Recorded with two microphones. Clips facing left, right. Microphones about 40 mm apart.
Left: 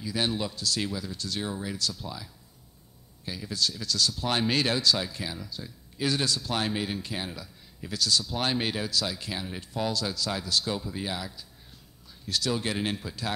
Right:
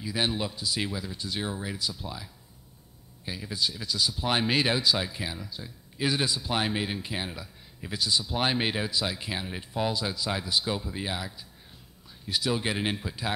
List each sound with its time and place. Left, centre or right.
0.0 s speech: centre